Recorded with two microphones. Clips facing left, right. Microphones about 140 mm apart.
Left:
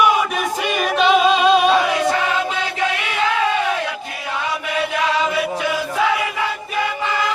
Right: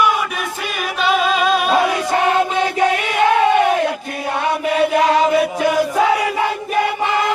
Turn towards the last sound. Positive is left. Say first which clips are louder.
# right 4 dB
turn(degrees=-40)  # may be behind; listen again after turning